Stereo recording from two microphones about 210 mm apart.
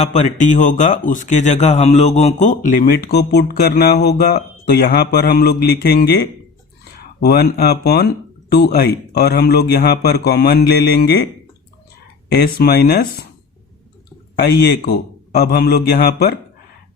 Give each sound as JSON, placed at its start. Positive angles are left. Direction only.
{"t": 0.0, "sound": "a man's voice", "side_deg": 35}
{"t": 12.3, "sound": "a man's voice", "side_deg": 50}
{"t": 14.3, "sound": "a man's voice", "side_deg": 50}